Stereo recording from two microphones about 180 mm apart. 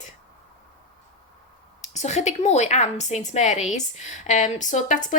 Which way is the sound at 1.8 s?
40° left (ahead or behind).